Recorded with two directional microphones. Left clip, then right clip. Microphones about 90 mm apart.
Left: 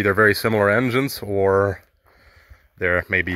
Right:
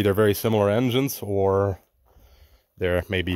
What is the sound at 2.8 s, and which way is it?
Speech, 35° right (ahead or behind).